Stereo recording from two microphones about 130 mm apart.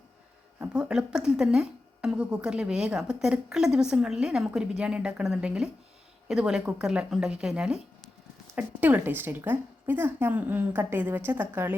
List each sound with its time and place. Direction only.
0.7 s a woman's voice: 5° right (ahead or behind)